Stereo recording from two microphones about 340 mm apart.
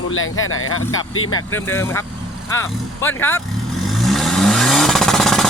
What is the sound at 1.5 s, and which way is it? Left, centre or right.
Speech, centre.